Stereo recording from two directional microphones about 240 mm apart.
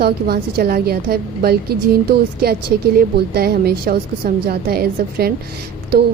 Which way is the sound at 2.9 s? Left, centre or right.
Right.